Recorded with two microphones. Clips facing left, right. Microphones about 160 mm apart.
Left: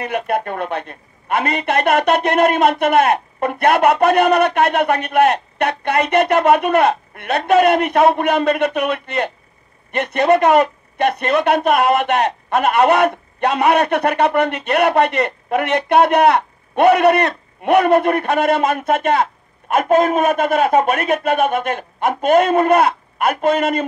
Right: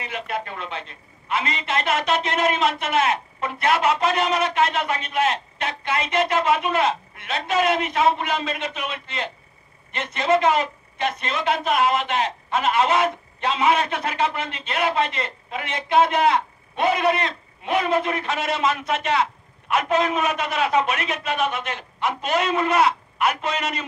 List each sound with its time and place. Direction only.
0.0 s a man's voice: 60° left (ahead or behind)